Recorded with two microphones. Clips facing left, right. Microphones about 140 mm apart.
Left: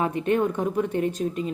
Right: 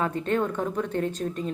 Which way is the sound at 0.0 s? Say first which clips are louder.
Left 3 dB; 15° left (ahead or behind).